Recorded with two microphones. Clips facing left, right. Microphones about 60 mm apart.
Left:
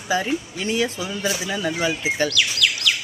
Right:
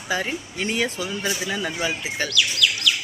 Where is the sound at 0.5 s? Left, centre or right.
Right.